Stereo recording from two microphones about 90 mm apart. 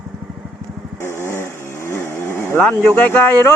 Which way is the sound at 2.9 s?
20° left (ahead or behind).